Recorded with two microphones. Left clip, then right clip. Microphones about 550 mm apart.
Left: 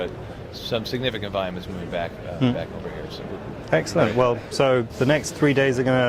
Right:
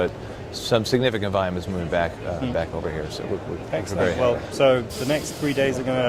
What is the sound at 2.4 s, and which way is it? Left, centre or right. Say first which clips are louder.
Speech: left 5 dB; left.